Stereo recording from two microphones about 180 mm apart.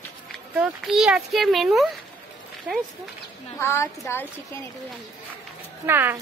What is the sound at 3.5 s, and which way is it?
Speech, 15° left (ahead or behind).